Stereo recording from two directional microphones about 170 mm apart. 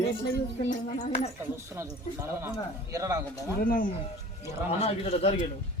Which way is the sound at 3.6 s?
55° left (ahead or behind).